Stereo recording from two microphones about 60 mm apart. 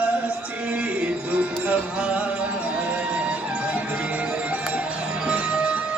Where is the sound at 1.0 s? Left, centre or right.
Right.